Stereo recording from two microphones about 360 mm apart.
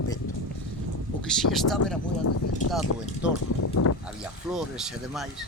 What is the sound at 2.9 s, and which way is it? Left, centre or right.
Speech, left.